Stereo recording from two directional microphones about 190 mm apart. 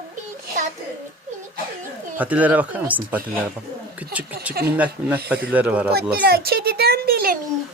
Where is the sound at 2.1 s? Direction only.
10° right (ahead or behind).